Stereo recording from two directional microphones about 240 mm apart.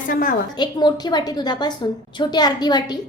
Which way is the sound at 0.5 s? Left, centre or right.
Centre.